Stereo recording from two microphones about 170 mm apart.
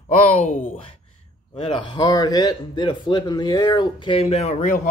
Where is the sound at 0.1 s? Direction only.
50° left (ahead or behind).